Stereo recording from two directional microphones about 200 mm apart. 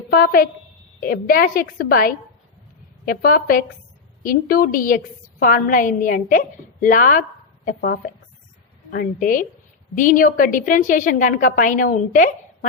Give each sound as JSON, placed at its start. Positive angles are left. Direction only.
{"t": 0.1, "sound": "a woman's voice", "side_deg": 50}